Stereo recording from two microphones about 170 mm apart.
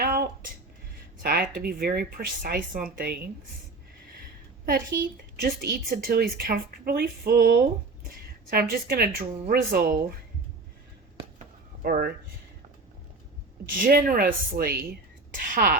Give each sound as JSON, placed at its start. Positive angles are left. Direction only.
{"t": 0.0, "sound": "a sound", "side_deg": -65}
{"t": 1.2, "sound": "a woman's voice", "side_deg": -65}
{"t": 4.6, "sound": "a woman's voice", "side_deg": -60}
{"t": 11.8, "sound": "a woman's voice", "side_deg": -60}
{"t": 13.7, "sound": "a woman's voice", "side_deg": -55}